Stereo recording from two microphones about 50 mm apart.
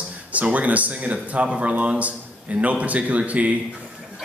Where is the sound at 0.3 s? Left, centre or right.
Right.